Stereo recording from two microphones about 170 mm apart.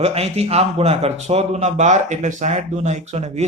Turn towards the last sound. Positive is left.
turn(degrees=-45)  # may be behind; listen again after turning